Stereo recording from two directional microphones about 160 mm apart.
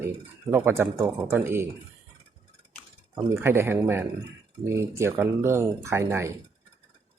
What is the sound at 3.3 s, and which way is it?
Speech, 15° right (ahead or behind).